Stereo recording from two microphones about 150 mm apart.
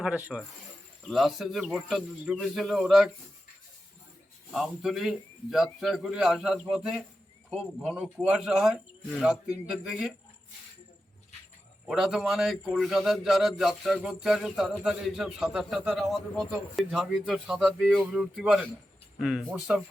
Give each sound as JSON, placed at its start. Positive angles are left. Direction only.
{"t": 0.0, "sound": "a man's voice", "side_deg": -5}
{"t": 4.5, "sound": "a man's voice", "side_deg": 0}
{"t": 11.9, "sound": "a man's voice", "side_deg": 0}